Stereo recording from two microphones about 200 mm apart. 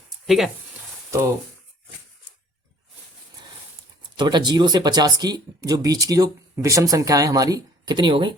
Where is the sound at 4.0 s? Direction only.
20° right (ahead or behind).